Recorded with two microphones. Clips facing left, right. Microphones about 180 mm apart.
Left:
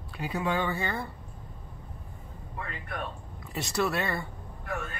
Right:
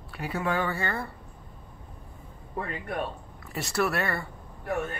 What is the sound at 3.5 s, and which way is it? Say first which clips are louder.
Speech: right 1 dB; 20° left (ahead or behind).